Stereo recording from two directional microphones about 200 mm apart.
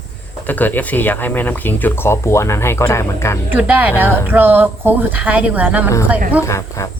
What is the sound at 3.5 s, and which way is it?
Speech, 10° right (ahead or behind).